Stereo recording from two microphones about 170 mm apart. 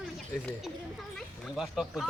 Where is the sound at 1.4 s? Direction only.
Centre (ahead or behind).